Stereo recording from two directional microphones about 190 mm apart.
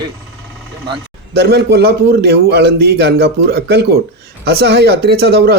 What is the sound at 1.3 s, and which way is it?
Speech, 55° right (ahead or behind).